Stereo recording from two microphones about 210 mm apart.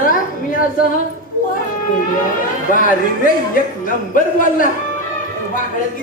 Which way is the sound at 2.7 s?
40° left (ahead or behind).